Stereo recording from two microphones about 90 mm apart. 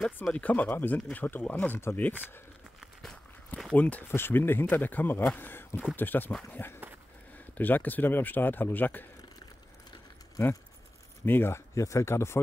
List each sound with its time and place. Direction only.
0.3 s a man's voice: 15° left (ahead or behind)
2.8 s walk: 5° left (ahead or behind)
3.7 s a man's voice: 15° left (ahead or behind)
11.2 s a man's voice: 25° left (ahead or behind)